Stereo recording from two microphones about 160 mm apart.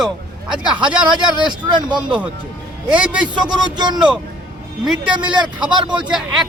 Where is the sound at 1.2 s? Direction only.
30° right (ahead or behind).